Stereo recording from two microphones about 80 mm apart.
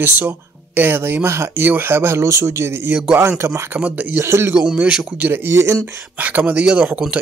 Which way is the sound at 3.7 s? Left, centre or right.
Centre.